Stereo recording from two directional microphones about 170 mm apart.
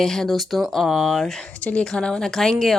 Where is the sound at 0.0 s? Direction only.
Centre (ahead or behind).